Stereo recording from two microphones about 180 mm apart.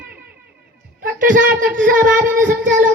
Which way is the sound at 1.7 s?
50° right (ahead or behind).